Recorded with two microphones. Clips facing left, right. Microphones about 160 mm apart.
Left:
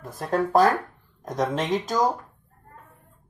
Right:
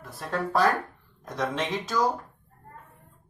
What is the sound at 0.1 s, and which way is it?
Speech, 45° left (ahead or behind).